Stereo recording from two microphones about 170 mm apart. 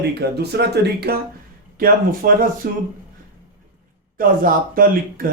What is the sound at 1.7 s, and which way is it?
Speech, 55° right (ahead or behind).